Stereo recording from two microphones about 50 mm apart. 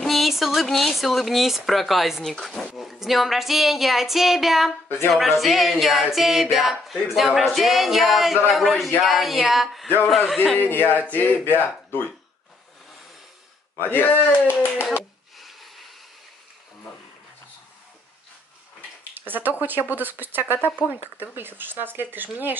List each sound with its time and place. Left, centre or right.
0.0 s speech: centre
4.8 s speech: left
5.1 s speech: centre
10.6 s speech: left
13.7 s speech: left
15.3 s a sound: centre
19.1 s a sound: right
19.6 s speech: right